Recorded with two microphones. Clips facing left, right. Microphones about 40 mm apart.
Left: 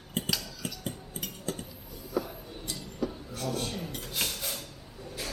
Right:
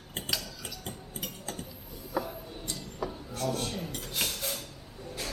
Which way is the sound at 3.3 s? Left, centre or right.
Centre.